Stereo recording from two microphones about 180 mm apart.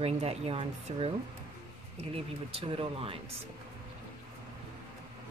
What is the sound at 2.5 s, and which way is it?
Speech, 30° right (ahead or behind).